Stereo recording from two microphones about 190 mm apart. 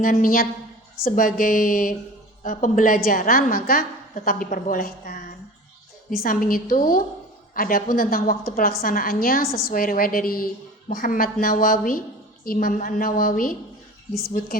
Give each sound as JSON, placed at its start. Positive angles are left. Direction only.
{"t": 0.0, "sound": "a woman's voice", "side_deg": 45}